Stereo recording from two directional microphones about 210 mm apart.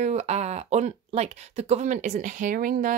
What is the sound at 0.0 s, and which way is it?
A woman's voice, 30° right (ahead or behind).